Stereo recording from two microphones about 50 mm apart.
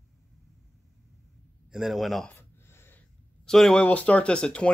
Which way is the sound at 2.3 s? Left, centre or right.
Left.